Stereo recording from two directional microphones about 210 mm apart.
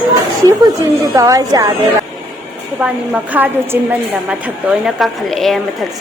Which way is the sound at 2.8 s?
5° right (ahead or behind).